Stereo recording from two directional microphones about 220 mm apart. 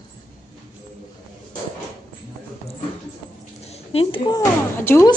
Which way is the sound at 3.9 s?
25° left (ahead or behind).